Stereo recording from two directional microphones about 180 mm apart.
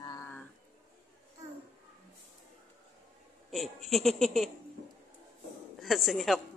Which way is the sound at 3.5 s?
Centre (ahead or behind).